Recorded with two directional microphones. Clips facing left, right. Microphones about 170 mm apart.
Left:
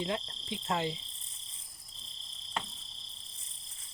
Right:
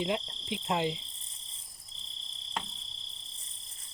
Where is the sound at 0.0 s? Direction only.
15° right (ahead or behind).